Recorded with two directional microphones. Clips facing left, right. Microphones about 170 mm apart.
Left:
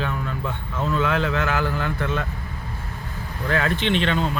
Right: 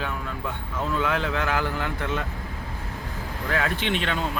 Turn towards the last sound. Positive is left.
turn(degrees=-10)  # may be behind; listen again after turning